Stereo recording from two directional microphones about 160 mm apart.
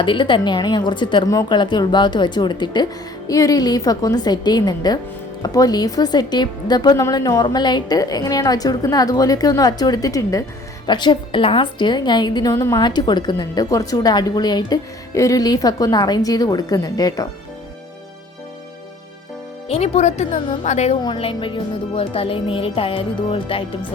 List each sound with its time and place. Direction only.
0.0 s a woman's voice: 30° left (ahead or behind)
19.6 s speech: 40° left (ahead or behind)
21.0 s speech: 30° left (ahead or behind)